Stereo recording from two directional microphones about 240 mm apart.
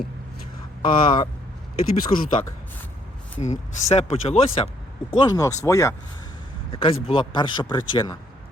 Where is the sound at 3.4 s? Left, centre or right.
Left.